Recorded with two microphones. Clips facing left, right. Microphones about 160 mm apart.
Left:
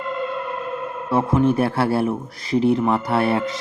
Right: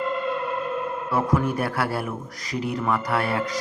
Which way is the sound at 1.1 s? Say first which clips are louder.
Left 6 dB; 25° left (ahead or behind).